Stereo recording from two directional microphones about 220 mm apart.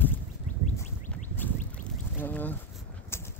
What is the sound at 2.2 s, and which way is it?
Boat, 10° left (ahead or behind).